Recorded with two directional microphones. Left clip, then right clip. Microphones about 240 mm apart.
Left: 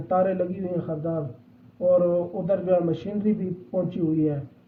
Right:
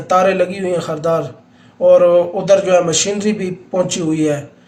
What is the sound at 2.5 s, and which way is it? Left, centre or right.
Speech, centre.